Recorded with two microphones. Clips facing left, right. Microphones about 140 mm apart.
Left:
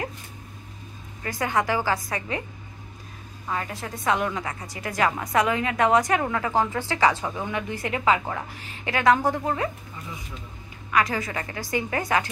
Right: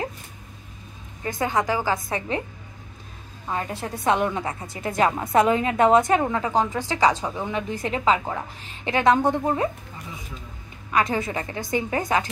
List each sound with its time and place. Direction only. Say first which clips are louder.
1.2 s a woman's voice: right 1 dB; 20° right (ahead or behind)
3.4 s a woman's voice: right 2 dB; 25° right (ahead or behind)
10.9 s a woman's voice: right 1 dB; 25° right (ahead or behind)